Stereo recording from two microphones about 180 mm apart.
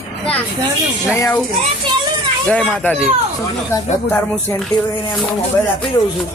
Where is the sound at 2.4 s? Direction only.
5° left (ahead or behind).